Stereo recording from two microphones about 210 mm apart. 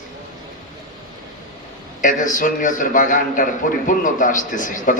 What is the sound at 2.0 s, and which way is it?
A man's voice, 40° left (ahead or behind).